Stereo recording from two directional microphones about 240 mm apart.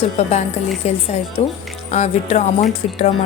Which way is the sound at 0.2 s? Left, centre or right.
Left.